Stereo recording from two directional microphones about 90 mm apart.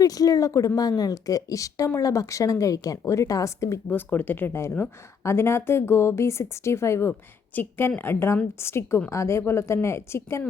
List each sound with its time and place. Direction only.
0.0 s speech: 40° left (ahead or behind)
3.8 s speech: 20° left (ahead or behind)